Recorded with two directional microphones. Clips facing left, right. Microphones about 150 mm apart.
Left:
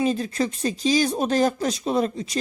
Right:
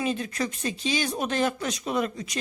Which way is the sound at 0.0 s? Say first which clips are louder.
Left 5 dB; 35° left (ahead or behind).